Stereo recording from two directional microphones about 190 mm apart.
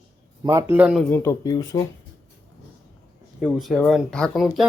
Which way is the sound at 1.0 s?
15° left (ahead or behind).